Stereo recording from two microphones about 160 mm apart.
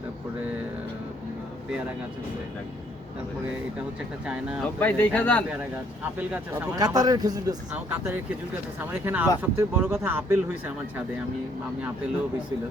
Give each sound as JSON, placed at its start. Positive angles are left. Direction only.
{"t": 4.8, "sound": "speech", "side_deg": 10}
{"t": 5.5, "sound": "speech", "side_deg": -10}
{"t": 6.7, "sound": "a man's voice", "side_deg": -25}
{"t": 7.7, "sound": "speech", "side_deg": -15}